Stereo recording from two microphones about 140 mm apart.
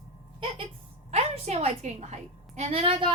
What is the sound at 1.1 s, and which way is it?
A woman's voice, 50° right (ahead or behind).